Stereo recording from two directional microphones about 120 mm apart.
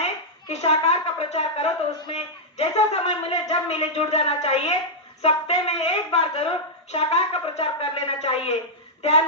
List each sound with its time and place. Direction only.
0.6 s speech: 60° left (ahead or behind)
9.0 s child singing: 60° left (ahead or behind)